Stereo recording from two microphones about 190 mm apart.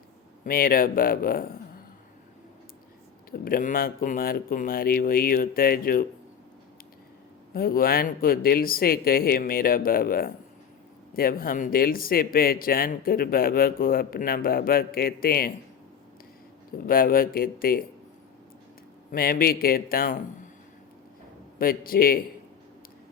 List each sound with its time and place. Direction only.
0.4 s speech: 50° left (ahead or behind)
3.3 s speech: 50° left (ahead or behind)
7.5 s speech: 50° left (ahead or behind)
16.8 s speech: 50° left (ahead or behind)
19.1 s speech: 50° left (ahead or behind)
21.6 s speech: 50° left (ahead or behind)